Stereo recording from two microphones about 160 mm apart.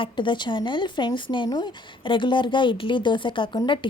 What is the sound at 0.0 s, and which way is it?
Speech, 30° left (ahead or behind).